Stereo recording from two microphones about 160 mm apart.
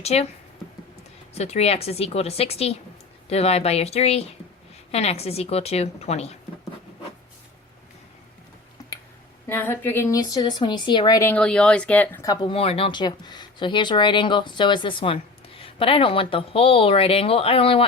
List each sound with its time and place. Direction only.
0.0 s speech: 40° left (ahead or behind)
1.3 s speech: 40° left (ahead or behind)
9.5 s speech: 10° left (ahead or behind)
11.3 s speech: 5° left (ahead or behind)
12.2 s speech: 25° left (ahead or behind)